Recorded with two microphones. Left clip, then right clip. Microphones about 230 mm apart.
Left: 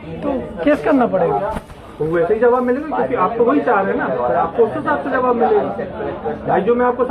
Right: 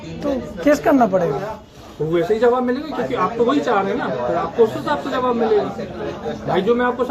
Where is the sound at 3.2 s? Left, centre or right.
Right.